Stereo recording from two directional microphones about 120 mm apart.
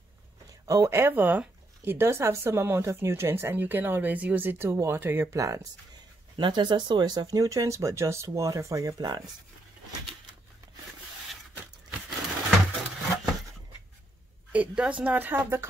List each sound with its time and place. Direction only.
0.7 s speech: 25° right (ahead or behind)
6.3 s speech: 40° right (ahead or behind)
12.7 s a sound: centre (ahead or behind)
14.5 s a woman's voice: 10° right (ahead or behind)